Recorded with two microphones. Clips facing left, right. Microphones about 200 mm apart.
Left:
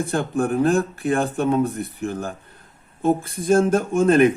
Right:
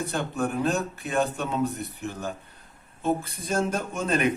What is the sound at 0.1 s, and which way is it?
Speech, 50° left (ahead or behind).